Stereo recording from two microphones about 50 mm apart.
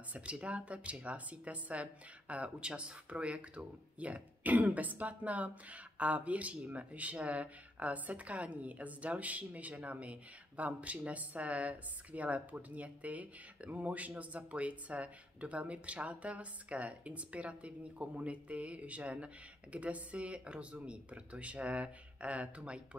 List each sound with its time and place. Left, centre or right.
0.1 s speech: right